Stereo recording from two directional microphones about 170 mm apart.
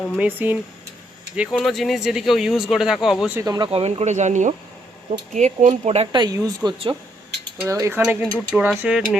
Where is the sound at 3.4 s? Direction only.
25° right (ahead or behind); by 6.0 s 40° right (ahead or behind).